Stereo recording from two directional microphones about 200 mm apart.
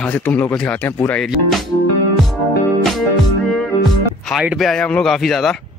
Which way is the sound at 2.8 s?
Centre (ahead or behind).